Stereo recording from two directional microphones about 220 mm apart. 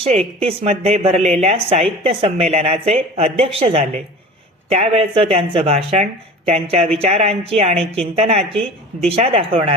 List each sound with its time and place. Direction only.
0.0 s a woman's voice: 30° right (ahead or behind)